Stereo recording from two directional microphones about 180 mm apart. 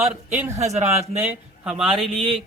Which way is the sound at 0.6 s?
40° right (ahead or behind).